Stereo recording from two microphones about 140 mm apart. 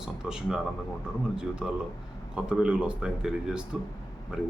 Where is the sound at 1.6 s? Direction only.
5° right (ahead or behind).